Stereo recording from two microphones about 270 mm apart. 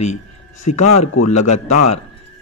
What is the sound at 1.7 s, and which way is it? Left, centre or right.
Speech, left.